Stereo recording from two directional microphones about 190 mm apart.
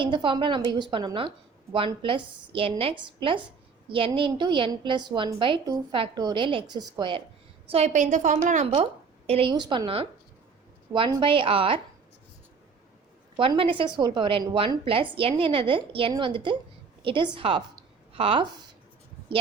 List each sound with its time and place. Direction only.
0.0 s a woman's voice: 25° right (ahead or behind)
7.7 s a woman's voice: 35° right (ahead or behind)
13.3 s a woman's voice: 25° right (ahead or behind)